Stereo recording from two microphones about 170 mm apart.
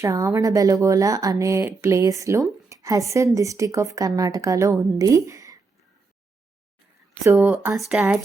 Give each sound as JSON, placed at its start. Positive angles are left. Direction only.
{"t": 0.0, "sound": "speech", "side_deg": -20}
{"t": 2.6, "sound": "a sound", "side_deg": -20}
{"t": 3.3, "sound": "speech", "side_deg": -20}
{"t": 7.3, "sound": "speech", "side_deg": -10}